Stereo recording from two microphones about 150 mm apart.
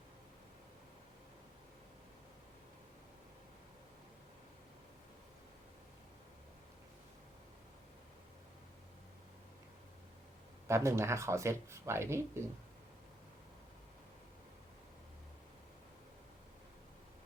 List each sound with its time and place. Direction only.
10.7 s speech: 20° right (ahead or behind)